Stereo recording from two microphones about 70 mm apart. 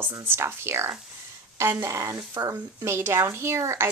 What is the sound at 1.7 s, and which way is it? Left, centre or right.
Speech, right.